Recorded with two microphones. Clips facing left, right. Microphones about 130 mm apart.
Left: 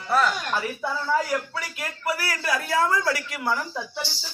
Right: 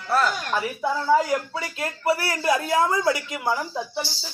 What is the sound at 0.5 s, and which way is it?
Speech, 20° right (ahead or behind).